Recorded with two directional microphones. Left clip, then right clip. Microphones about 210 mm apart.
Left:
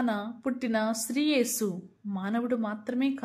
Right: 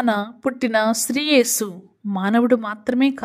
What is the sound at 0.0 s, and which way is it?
Speech, 45° right (ahead or behind).